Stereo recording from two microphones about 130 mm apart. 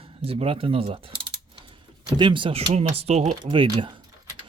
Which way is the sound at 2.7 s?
55° right (ahead or behind).